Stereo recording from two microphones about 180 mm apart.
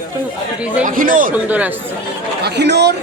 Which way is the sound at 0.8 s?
50° right (ahead or behind).